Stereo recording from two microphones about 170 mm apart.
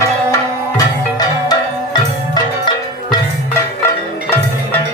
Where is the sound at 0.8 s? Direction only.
20° left (ahead or behind).